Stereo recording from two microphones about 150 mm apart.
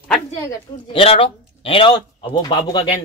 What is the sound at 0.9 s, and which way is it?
A man's voice, 40° left (ahead or behind).